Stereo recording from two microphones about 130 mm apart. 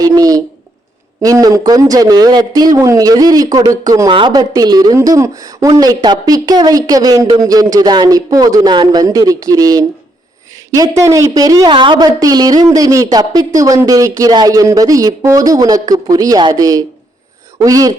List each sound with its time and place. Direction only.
0.0 s a woman's voice: 30° right (ahead or behind)
11.7 s speech: 40° right (ahead or behind)